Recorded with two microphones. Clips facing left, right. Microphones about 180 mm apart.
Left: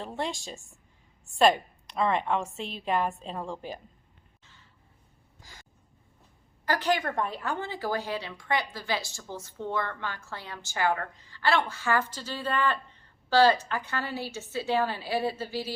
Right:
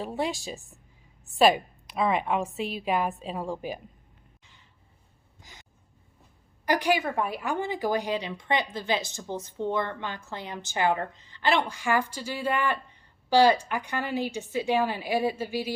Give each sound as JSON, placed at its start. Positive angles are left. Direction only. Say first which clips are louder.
{"t": 0.0, "sound": "a woman's voice", "louder": "right 3 dB", "side_deg": -10}
{"t": 5.4, "sound": "gasp", "louder": "even", "side_deg": -20}
{"t": 6.7, "sound": "a woman's voice", "louder": "right 2 dB", "side_deg": -15}